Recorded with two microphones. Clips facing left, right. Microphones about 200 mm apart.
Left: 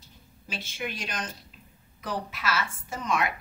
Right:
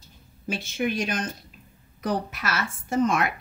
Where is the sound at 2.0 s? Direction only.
50° right (ahead or behind).